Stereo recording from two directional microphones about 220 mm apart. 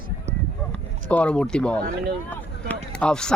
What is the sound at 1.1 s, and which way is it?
Speech, 5° left (ahead or behind).